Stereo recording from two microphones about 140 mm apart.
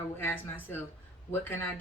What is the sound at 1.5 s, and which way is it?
Speech, 15° left (ahead or behind).